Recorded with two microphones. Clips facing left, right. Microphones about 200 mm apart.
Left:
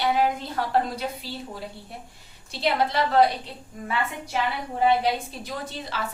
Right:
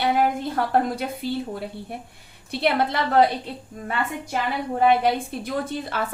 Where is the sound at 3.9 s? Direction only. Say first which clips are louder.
Right 2 dB; 50° right (ahead or behind).